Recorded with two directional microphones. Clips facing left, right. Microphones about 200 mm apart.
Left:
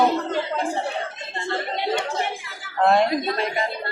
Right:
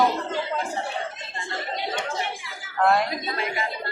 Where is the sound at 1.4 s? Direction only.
65° left (ahead or behind).